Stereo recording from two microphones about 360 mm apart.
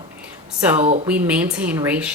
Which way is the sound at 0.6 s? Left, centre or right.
Centre.